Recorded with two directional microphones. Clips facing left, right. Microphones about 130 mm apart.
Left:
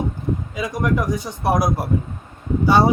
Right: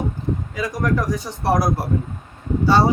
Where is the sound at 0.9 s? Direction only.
20° left (ahead or behind).